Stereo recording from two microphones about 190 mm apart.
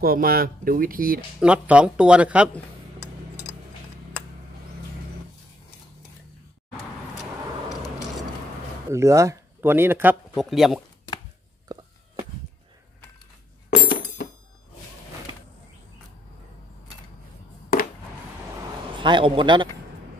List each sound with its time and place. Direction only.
0.0 s speech: 50° right (ahead or behind)
1.4 s speech: 5° right (ahead or behind)
8.9 s speech: 15° right (ahead or behind)
10.3 s speech: centre (ahead or behind)
11.7 s a sound: 20° right (ahead or behind)
13.7 s a sound: 45° left (ahead or behind)
18.9 s a man's voice: 25° right (ahead or behind)